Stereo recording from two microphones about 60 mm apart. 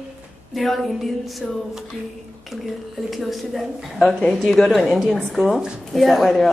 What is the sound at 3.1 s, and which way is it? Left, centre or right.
A woman's voice, centre.